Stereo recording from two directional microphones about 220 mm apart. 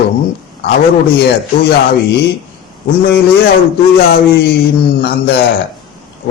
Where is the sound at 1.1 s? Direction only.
50° left (ahead or behind).